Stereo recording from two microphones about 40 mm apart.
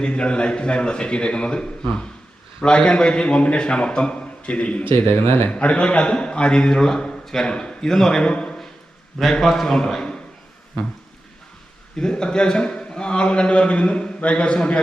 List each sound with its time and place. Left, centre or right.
0.0 s a man's voice: left
4.8 s speech: left
5.5 s a man's voice: left; by 8.2 s centre
8.2 s a man's voice: left
9.4 s a man's voice: centre
11.9 s a man's voice: left